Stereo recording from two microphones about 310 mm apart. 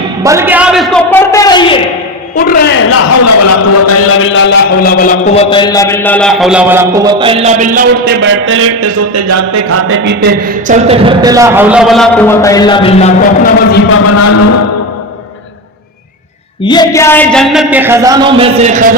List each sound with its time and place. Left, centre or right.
0.2 s a man's voice: centre
2.3 s a man's voice: left
2.9 s a man's voice: left; by 9.8 s right
9.9 s a man's voice: right; by 13.5 s left
13.7 s a man's voice: left
16.6 s a man's voice: centre; by 18.9 s right